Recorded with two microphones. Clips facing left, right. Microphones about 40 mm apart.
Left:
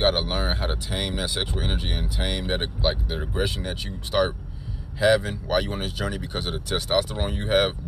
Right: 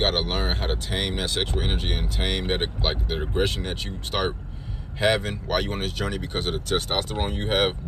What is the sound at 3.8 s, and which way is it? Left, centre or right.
Speech, right.